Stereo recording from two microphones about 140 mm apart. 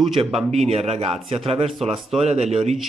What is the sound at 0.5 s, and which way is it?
Speech, 50° right (ahead or behind).